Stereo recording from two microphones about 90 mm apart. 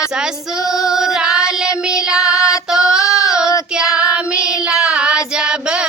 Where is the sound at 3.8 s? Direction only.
40° left (ahead or behind).